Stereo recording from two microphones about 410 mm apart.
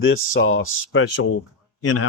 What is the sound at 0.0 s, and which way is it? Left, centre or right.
Speech, left.